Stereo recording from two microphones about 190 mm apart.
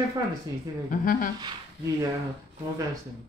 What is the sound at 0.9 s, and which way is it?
Speech, 50° left (ahead or behind).